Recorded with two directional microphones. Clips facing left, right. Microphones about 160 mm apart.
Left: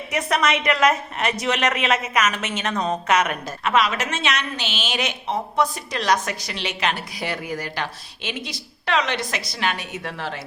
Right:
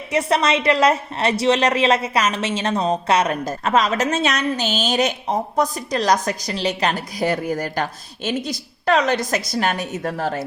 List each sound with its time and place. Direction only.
0.1 s a woman's voice: 30° right (ahead or behind)